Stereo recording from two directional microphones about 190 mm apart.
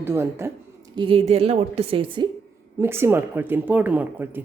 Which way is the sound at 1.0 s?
30° right (ahead or behind).